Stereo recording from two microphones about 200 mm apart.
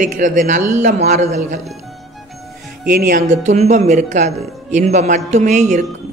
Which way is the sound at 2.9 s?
45° right (ahead or behind).